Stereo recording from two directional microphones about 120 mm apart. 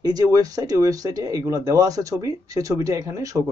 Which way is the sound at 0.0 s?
30° right (ahead or behind).